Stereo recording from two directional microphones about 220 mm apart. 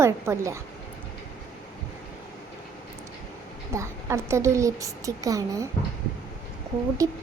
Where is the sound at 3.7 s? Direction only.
10° right (ahead or behind).